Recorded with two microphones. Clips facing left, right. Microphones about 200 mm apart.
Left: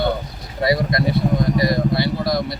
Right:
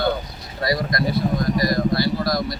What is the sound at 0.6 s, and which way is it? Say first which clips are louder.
Speech: left 3 dB; 25° left (ahead or behind).